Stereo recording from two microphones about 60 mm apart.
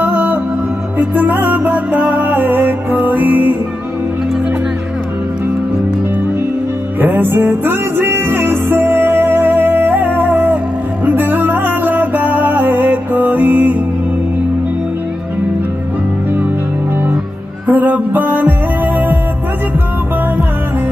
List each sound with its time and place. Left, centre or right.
0.0 s music: right
7.0 s music: right
17.6 s music: right